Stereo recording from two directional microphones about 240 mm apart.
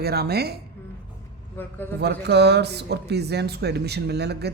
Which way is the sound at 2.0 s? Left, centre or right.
Right.